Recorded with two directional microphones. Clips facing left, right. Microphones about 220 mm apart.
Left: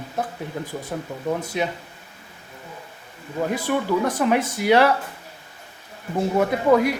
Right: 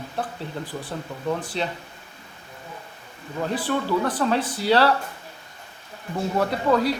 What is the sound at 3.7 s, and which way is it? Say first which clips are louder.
Speech: left 2 dB; 15° left (ahead or behind).